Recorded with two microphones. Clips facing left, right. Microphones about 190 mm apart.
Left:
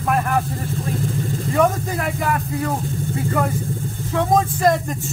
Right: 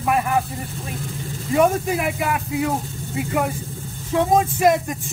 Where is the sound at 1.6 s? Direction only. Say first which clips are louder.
Right 2 dB; 15° right (ahead or behind).